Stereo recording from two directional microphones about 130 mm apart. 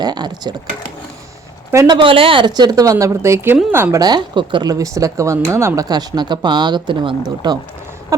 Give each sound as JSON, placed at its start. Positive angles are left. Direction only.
{"t": 0.0, "sound": "speech", "side_deg": -35}
{"t": 1.7, "sound": "a woman's voice", "side_deg": -20}
{"t": 2.0, "sound": "a woman's voice", "side_deg": -45}
{"t": 4.0, "sound": "speech", "side_deg": -35}